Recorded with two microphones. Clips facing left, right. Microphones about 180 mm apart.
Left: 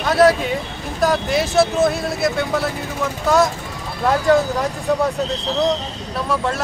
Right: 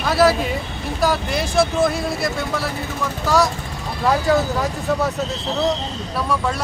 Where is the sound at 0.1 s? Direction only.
Centre (ahead or behind).